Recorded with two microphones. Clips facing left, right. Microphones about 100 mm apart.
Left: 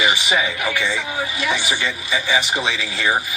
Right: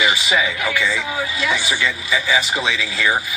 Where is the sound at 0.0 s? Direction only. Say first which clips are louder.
Right 1 dB; 25° left (ahead or behind).